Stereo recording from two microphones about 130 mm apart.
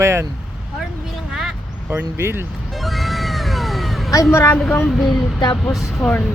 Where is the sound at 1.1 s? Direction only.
5° right (ahead or behind).